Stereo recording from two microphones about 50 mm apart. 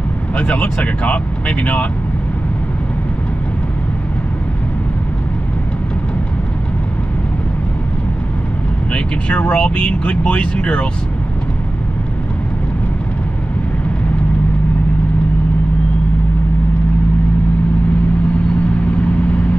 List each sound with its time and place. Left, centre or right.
0.4 s speech: left
8.9 s speech: left
18.8 s vehicle: left